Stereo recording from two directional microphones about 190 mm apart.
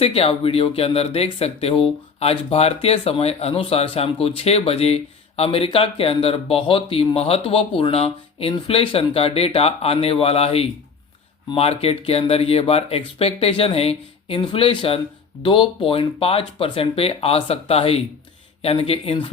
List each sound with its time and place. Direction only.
0.0 s speech: 30° left (ahead or behind)